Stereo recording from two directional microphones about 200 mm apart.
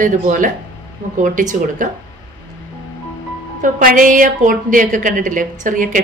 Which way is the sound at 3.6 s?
40° right (ahead or behind).